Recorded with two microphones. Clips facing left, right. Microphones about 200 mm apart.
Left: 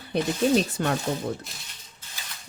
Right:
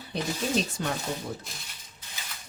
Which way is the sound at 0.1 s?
60° left (ahead or behind).